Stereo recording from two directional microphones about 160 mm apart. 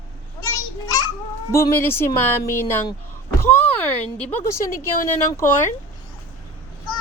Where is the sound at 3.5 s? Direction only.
10° left (ahead or behind).